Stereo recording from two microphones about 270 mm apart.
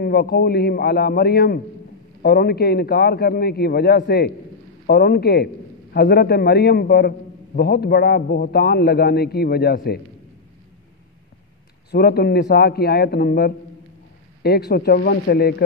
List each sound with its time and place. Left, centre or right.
0.0 s a man's voice: left
11.9 s a man's voice: left